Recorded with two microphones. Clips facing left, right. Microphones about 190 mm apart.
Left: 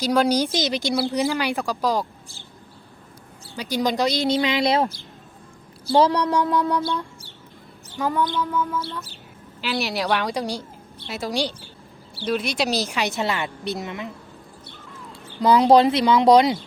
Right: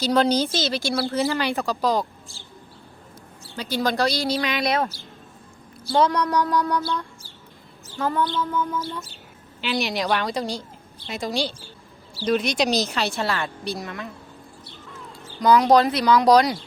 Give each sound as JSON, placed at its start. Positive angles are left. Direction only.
{"t": 0.0, "sound": "speech", "side_deg": 10}
{"t": 3.5, "sound": "speech", "side_deg": 15}
{"t": 5.9, "sound": "speech", "side_deg": 30}
{"t": 7.9, "sound": "speech", "side_deg": 15}
{"t": 15.4, "sound": "speech", "side_deg": 30}